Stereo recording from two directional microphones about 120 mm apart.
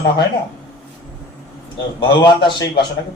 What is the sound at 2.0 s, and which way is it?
Speech, 40° left (ahead or behind).